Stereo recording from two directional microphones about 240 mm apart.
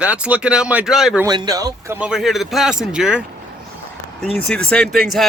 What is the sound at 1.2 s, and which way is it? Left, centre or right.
A man's voice, centre.